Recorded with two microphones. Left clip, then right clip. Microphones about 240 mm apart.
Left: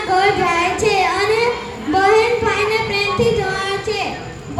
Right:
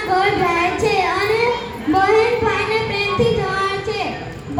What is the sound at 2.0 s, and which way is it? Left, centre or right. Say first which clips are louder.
Child singing: left 1 dB; left.